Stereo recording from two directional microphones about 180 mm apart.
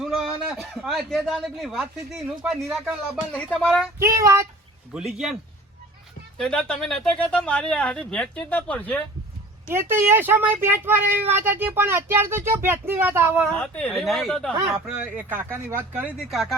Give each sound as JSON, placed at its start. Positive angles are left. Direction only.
{"t": 0.0, "sound": "speech", "side_deg": 0}
{"t": 4.0, "sound": "speech", "side_deg": -15}
{"t": 4.9, "sound": "speech", "side_deg": -5}
{"t": 9.6, "sound": "speech", "side_deg": -15}
{"t": 13.5, "sound": "speech", "side_deg": 10}